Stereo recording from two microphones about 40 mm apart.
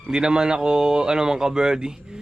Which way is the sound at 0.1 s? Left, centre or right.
Centre.